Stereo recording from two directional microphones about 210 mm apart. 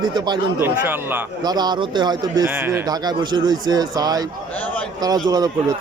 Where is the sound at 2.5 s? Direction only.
10° right (ahead or behind).